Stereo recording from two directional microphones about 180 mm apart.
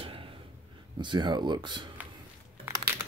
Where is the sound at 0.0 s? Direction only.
30° right (ahead or behind).